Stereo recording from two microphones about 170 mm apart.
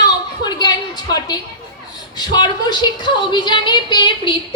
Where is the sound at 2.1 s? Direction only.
25° left (ahead or behind).